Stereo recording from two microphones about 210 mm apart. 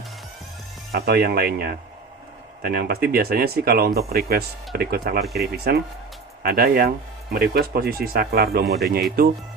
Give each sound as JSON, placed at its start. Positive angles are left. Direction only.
{"t": 0.9, "sound": "speech", "side_deg": -50}